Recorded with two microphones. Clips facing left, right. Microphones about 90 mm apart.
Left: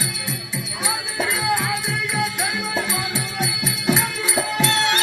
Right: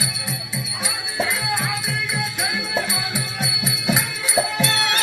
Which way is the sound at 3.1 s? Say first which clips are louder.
Left 2 dB; 20° right (ahead or behind).